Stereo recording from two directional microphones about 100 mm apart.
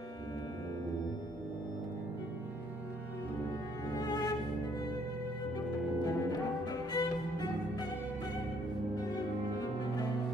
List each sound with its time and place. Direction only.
3.9 s music: 40° left (ahead or behind)
6.0 s music: 40° left (ahead or behind)
8.9 s music: 40° left (ahead or behind)